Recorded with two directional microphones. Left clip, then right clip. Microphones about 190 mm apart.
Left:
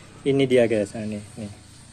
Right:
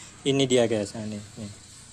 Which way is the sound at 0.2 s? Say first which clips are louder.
Left 3 dB; 35° right (ahead or behind).